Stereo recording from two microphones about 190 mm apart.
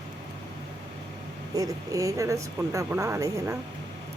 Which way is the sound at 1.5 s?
20° right (ahead or behind).